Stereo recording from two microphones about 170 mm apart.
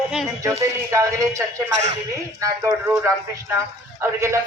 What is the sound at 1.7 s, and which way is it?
Speech, 45° right (ahead or behind).